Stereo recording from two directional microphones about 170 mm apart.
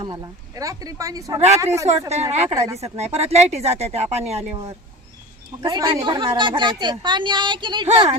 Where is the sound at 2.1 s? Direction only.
40° right (ahead or behind).